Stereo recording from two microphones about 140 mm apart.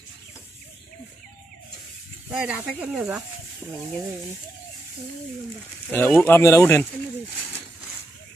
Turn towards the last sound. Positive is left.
turn(degrees=20)  # may be behind; listen again after turning